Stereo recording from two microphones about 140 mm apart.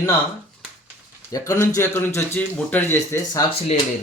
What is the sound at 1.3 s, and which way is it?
Speech, 20° left (ahead or behind).